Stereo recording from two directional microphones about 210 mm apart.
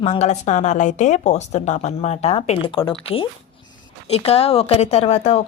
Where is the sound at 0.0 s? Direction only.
30° left (ahead or behind).